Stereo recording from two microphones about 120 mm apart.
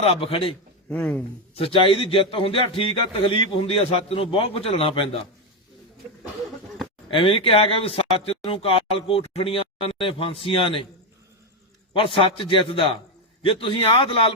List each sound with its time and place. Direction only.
0.0 s speech: 50° left (ahead or behind)
0.9 s speech: 10° left (ahead or behind)
1.5 s speech: 50° left (ahead or behind)
7.1 s speech: 50° left (ahead or behind)
11.9 s speech: 45° left (ahead or behind)